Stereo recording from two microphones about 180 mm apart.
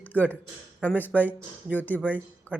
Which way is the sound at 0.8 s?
10° left (ahead or behind).